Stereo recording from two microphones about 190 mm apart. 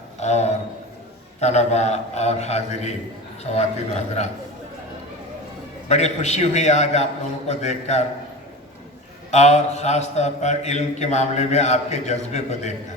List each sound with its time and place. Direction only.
0.2 s a man's voice: 35° left (ahead or behind)
5.9 s a man's voice: 35° left (ahead or behind)
9.3 s a man's voice: 35° left (ahead or behind)